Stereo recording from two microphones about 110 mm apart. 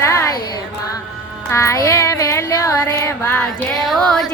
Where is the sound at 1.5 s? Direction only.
25° left (ahead or behind).